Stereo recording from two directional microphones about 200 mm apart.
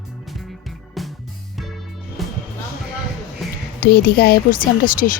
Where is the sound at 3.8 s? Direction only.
50° left (ahead or behind).